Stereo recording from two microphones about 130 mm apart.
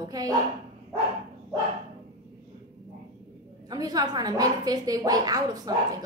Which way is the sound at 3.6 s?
30° right (ahead or behind).